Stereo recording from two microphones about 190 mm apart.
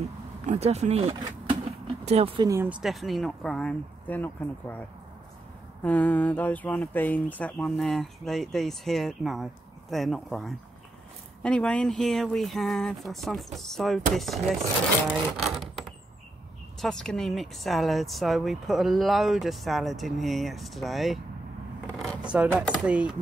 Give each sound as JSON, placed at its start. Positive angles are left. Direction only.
{"t": 0.5, "sound": "speech", "side_deg": -35}
{"t": 2.5, "sound": "speech", "side_deg": -10}
{"t": 5.9, "sound": "speech", "side_deg": 10}
{"t": 16.8, "sound": "speech", "side_deg": 5}
{"t": 21.9, "sound": "vehicle", "side_deg": 5}
{"t": 22.2, "sound": "speech", "side_deg": -5}